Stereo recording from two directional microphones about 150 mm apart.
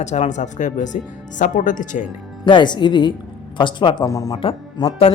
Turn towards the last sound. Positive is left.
turn(degrees=40)  # may be behind; listen again after turning